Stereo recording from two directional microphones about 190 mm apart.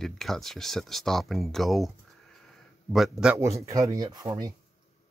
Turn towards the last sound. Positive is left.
turn(degrees=-20)  # may be behind; listen again after turning